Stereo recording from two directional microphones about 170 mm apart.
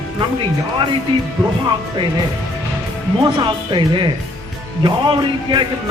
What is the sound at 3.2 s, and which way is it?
Speech, 30° right (ahead or behind).